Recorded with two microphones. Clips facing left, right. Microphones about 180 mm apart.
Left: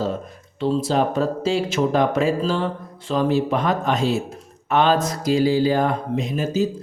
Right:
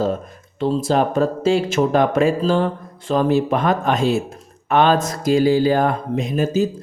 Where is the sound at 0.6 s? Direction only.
50° right (ahead or behind).